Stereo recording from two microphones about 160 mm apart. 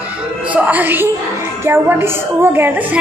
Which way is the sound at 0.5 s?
10° right (ahead or behind).